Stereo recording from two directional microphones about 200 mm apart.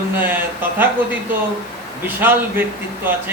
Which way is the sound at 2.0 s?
10° right (ahead or behind).